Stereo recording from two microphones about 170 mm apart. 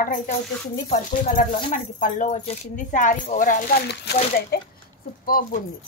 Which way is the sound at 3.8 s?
75° left (ahead or behind).